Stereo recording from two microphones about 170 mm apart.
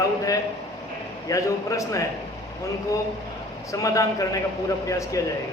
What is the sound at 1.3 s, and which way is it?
Speech, 20° left (ahead or behind).